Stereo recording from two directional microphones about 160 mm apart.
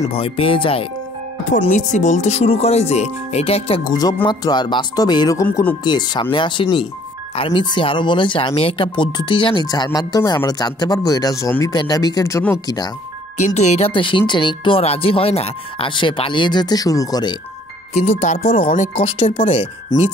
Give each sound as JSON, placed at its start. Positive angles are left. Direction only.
{"t": 0.1, "sound": "speech", "side_deg": 35}
{"t": 1.7, "sound": "speech", "side_deg": 50}
{"t": 4.3, "sound": "speech", "side_deg": 25}
{"t": 13.6, "sound": "speech", "side_deg": 40}
{"t": 17.9, "sound": "speech", "side_deg": 45}
{"t": 19.9, "sound": "speech", "side_deg": 25}